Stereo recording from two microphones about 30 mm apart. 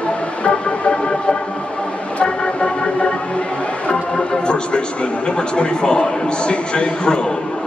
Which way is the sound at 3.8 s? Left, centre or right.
Left.